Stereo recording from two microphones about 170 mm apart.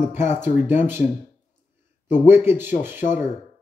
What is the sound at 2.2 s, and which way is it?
Speech, 15° right (ahead or behind).